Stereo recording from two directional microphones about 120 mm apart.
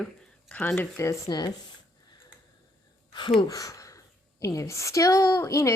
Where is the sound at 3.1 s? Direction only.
40° left (ahead or behind).